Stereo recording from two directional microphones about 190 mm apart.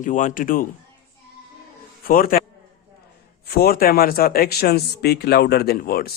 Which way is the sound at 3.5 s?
50° left (ahead or behind).